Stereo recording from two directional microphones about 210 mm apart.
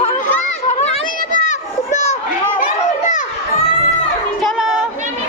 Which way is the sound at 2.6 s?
35° left (ahead or behind).